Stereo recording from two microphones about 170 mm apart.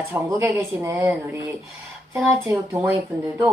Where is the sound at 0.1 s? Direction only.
15° right (ahead or behind).